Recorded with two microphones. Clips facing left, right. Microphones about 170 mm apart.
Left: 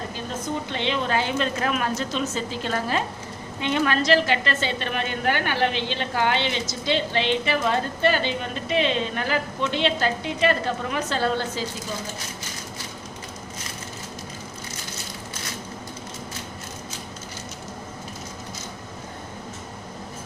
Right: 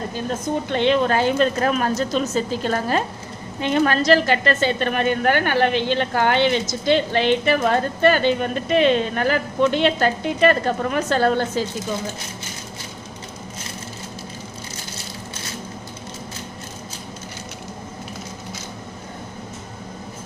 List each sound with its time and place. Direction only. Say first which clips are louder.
0.7 s a woman's voice: right 8 dB; 50° right (ahead or behind)